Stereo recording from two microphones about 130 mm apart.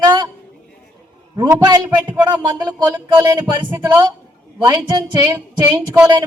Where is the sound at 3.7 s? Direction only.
20° right (ahead or behind).